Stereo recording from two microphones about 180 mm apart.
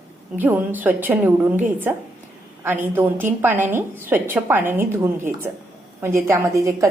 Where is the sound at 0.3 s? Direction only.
10° right (ahead or behind).